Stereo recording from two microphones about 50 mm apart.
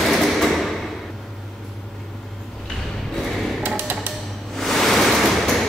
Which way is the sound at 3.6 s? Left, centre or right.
Right.